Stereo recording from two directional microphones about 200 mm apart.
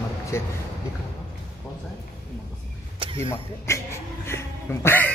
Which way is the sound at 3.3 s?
15° left (ahead or behind).